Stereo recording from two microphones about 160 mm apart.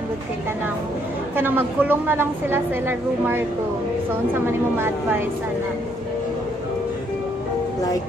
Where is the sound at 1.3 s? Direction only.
10° right (ahead or behind).